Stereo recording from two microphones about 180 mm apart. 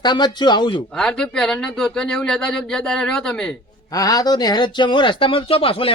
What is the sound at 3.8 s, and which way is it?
Speech, 20° left (ahead or behind).